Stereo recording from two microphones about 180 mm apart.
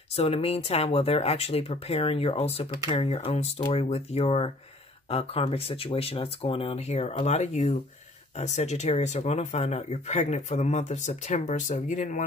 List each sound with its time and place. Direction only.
0.1 s speech: 35° left (ahead or behind)